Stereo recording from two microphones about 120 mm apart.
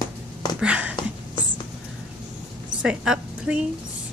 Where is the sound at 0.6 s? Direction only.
10° right (ahead or behind).